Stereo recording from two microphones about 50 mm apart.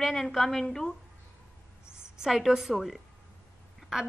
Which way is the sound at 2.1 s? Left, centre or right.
Centre.